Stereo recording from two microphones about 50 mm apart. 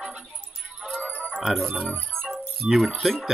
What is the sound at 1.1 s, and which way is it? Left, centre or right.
Music, left.